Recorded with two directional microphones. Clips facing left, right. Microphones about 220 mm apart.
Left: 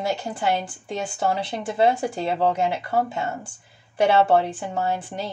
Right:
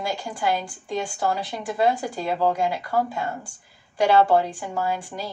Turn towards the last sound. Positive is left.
turn(degrees=25)  # may be behind; listen again after turning